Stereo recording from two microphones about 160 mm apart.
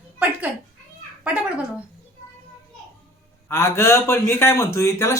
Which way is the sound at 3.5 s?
15° left (ahead or behind).